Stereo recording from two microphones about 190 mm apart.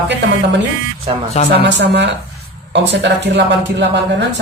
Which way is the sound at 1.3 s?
35° left (ahead or behind).